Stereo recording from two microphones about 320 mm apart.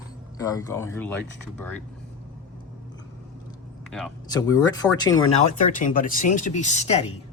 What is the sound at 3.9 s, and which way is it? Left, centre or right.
Speech, centre.